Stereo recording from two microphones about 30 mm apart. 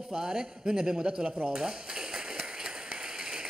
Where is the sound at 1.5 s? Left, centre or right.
Right.